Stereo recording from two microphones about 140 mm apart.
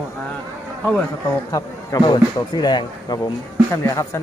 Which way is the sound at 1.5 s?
25° left (ahead or behind).